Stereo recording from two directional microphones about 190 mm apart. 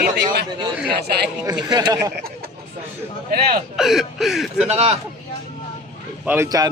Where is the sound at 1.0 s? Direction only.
60° right (ahead or behind).